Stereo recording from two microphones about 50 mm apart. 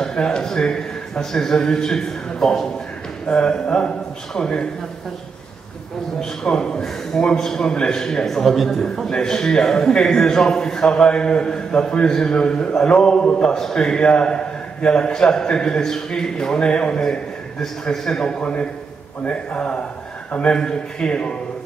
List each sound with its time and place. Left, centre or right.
0.0 s a man's voice: centre
3.3 s a man's voice: centre
6.4 s a man's voice: centre